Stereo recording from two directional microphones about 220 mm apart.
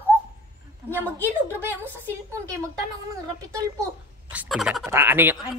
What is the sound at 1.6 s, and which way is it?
Speech, 10° right (ahead or behind).